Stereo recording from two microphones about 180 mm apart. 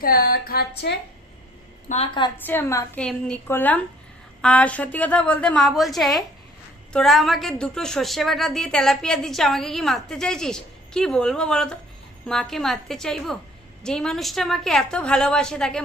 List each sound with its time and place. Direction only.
0.0 s a sound: 55° left (ahead or behind)
1.9 s a woman's voice: 30° left (ahead or behind)
2.5 s a woman's voice: 15° left (ahead or behind)